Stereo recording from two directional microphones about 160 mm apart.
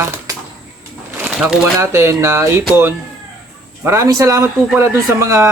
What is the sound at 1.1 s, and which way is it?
Pigeon, 10° right (ahead or behind).